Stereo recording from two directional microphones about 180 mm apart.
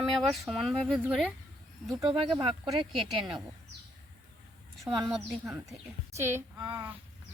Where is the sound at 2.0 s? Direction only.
25° right (ahead or behind).